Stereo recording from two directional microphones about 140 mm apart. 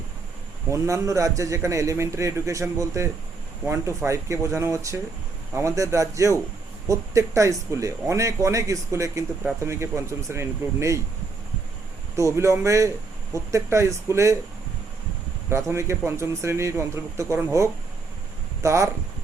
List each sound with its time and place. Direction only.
0.7 s speech: 20° right (ahead or behind)
12.1 s speech: 20° right (ahead or behind)
15.4 s speech: 20° right (ahead or behind)